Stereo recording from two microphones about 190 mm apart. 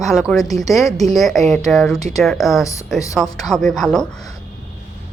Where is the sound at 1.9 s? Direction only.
20° left (ahead or behind).